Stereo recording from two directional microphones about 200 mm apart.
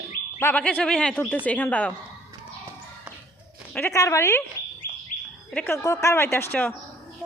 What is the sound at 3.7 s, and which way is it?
Speech, 10° left (ahead or behind).